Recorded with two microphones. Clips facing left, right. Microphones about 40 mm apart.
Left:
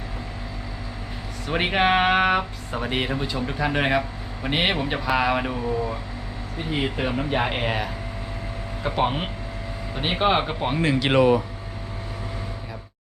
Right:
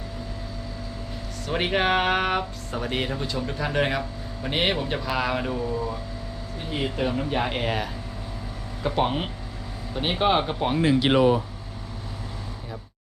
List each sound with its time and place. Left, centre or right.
1.5 s speech: centre